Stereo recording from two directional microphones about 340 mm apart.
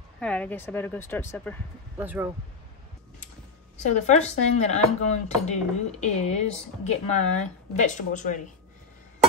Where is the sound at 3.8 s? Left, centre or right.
Centre.